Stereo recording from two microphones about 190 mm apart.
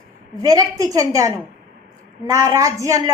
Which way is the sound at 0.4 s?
20° right (ahead or behind).